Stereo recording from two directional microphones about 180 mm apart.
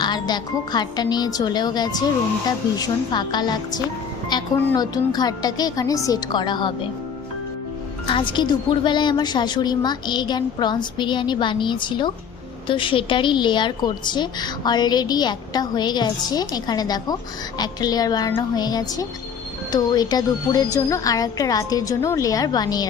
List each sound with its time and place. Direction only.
0.0 s a woman's voice: 25° left (ahead or behind)
8.0 s a woman's voice: 25° left (ahead or behind)